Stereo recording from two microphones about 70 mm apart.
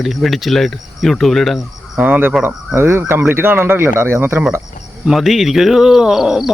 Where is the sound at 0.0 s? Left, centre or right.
Centre.